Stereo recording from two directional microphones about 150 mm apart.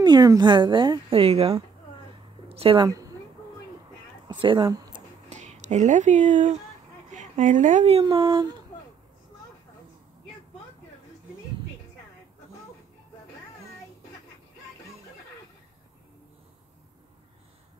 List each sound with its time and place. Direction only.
0.0 s a woman's voice: 25° right (ahead or behind)
2.5 s a woman's voice: 35° right (ahead or behind)
2.9 s a sound: 25° right (ahead or behind)
4.3 s a woman's voice: 30° right (ahead or behind)
4.6 s a sound: 25° right (ahead or behind)
5.3 s speech: 50° right (ahead or behind); by 8.5 s 30° right (ahead or behind)